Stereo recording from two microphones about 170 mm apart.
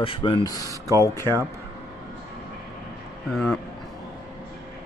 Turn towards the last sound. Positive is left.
turn(degrees=0)  # may be behind; listen again after turning